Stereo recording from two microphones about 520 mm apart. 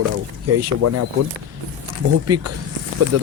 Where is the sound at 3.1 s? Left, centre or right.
Right.